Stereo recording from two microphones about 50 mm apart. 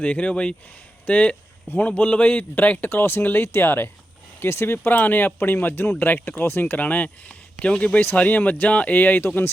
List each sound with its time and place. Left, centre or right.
0.0 s speech: left
4.9 s speech: left